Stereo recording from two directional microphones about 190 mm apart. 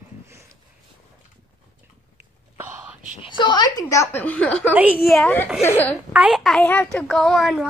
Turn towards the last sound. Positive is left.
turn(degrees=0)  # may be behind; listen again after turning